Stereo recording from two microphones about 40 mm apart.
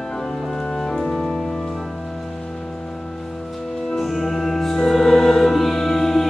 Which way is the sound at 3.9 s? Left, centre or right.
Centre.